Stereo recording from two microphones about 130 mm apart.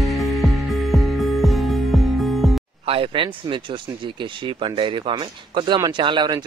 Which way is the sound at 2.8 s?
45° right (ahead or behind).